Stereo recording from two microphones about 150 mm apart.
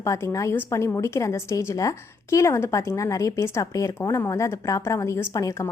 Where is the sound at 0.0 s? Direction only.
20° left (ahead or behind).